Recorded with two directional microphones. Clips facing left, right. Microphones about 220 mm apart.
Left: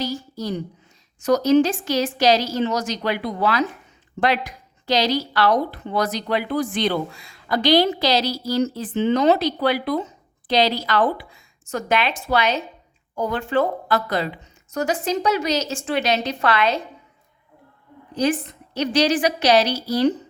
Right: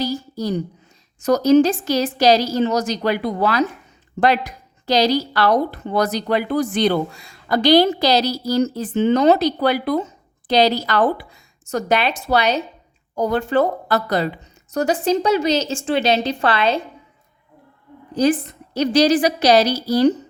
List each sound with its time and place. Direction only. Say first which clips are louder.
0.0 s a woman's voice: right 4 dB; 35° right (ahead or behind)
4.9 s a woman's voice: right 4 dB; 40° right (ahead or behind)
18.1 s a woman's voice: right 4 dB; 35° right (ahead or behind)